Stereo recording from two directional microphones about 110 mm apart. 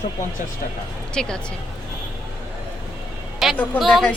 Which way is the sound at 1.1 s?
5° left (ahead or behind).